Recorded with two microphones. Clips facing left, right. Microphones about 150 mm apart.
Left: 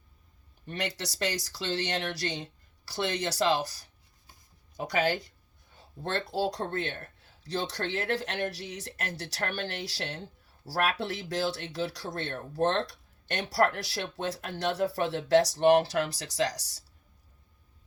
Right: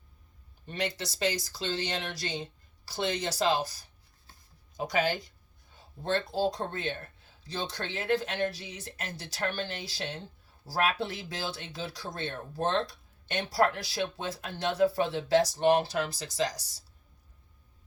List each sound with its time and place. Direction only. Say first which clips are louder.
0.7 s speech: right 1 dB; 70° left (ahead or behind)
4.9 s speech: left 1 dB; 65° left (ahead or behind)